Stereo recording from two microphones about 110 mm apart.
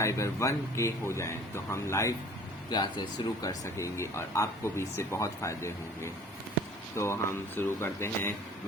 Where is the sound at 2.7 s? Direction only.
40° left (ahead or behind).